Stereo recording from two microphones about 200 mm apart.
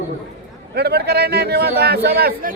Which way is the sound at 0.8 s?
55° right (ahead or behind).